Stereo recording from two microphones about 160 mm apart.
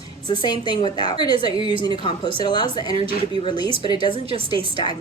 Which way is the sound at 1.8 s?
30° left (ahead or behind).